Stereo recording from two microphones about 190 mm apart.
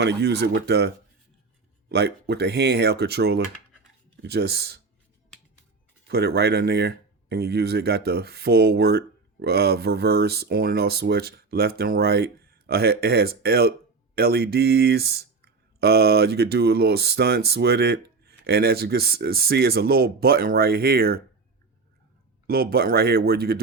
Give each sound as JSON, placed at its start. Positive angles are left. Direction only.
{"t": 0.0, "sound": "speech", "side_deg": -60}
{"t": 6.1, "sound": "speech", "side_deg": -55}
{"t": 22.4, "sound": "speech", "side_deg": -55}